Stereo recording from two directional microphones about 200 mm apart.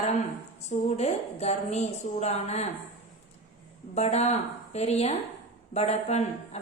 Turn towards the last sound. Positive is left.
turn(degrees=35)  # may be behind; listen again after turning